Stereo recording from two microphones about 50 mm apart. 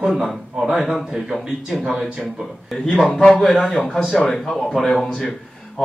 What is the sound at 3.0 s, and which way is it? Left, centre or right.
Speech, centre.